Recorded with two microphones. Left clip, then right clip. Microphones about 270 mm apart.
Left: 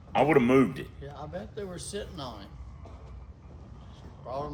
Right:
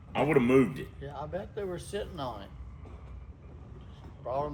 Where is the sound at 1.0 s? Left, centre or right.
Right.